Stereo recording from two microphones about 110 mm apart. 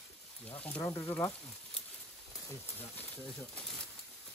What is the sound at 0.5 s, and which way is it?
Speech, 15° left (ahead or behind).